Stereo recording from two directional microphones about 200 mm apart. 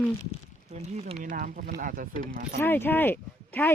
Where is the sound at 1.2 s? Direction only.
45° right (ahead or behind).